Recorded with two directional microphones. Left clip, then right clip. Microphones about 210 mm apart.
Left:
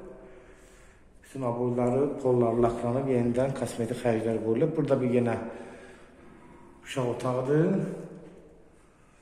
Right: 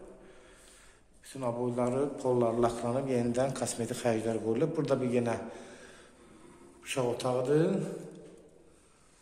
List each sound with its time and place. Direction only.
1.3 s a man's voice: centre (ahead or behind)
6.8 s a man's voice: centre (ahead or behind)